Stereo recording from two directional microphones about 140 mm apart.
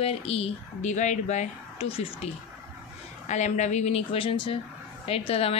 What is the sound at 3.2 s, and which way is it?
A woman's voice, 60° left (ahead or behind).